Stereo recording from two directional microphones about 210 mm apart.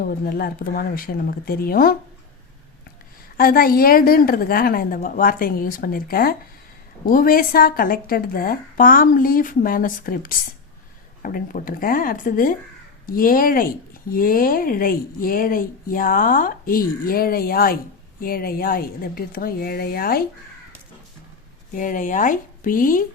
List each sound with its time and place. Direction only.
0.0 s speech: 45° left (ahead or behind)
3.3 s speech: 45° left (ahead or behind)
21.7 s speech: 40° left (ahead or behind)